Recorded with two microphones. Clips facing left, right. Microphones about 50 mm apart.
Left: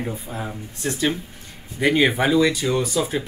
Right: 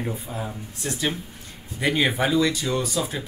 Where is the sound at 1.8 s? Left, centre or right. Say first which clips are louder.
Left 4 dB; centre.